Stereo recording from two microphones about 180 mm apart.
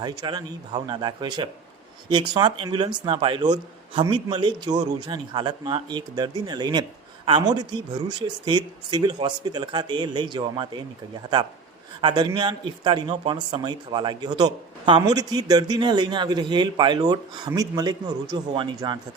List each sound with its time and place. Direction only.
0.0 s speech: 25° right (ahead or behind)
11.9 s speech: 25° right (ahead or behind)